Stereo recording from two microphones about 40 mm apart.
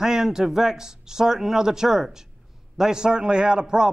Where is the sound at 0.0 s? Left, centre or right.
Centre.